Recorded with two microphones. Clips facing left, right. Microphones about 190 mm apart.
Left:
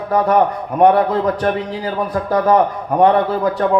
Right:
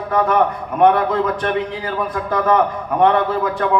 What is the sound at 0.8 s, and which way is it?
A man's voice, 35° left (ahead or behind).